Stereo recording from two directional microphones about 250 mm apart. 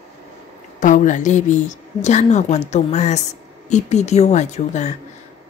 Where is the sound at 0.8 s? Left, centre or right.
Left.